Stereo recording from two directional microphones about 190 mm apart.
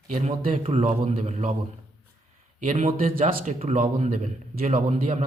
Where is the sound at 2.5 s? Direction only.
40° right (ahead or behind).